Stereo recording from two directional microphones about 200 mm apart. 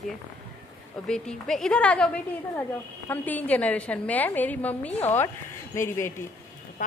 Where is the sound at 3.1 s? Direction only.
10° left (ahead or behind).